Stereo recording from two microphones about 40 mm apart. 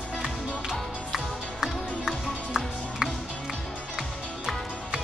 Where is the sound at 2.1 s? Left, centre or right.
Centre.